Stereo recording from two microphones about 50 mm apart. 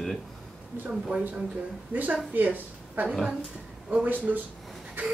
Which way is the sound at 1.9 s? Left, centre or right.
Right.